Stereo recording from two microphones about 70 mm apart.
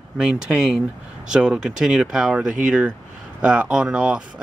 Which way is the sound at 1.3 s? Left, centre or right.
Centre.